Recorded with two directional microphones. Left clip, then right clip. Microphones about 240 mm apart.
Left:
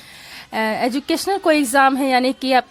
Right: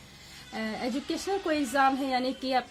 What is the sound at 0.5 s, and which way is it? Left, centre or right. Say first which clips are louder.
A woman's voice: left 13 dB; left.